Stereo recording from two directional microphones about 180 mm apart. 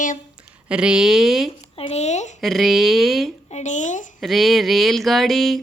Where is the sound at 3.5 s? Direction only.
40° left (ahead or behind).